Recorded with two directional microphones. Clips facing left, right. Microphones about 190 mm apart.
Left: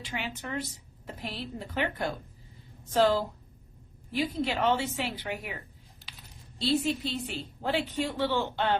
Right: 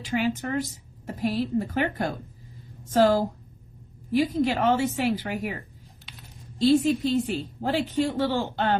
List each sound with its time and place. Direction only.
0.0 s a woman's voice: 45° right (ahead or behind)